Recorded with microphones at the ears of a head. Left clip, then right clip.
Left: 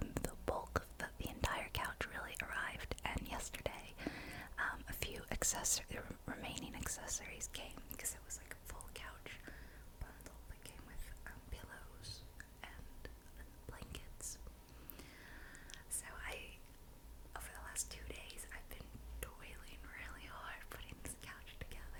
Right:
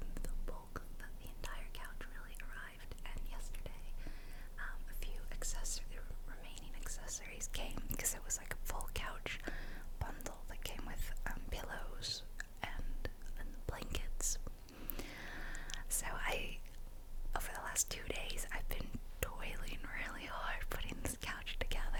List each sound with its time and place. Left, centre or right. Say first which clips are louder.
0.0 s whispering: left 10 dB; left
7.7 s whispering: right 6 dB; right